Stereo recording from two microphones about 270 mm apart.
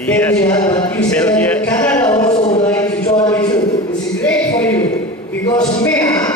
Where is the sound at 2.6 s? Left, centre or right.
Centre.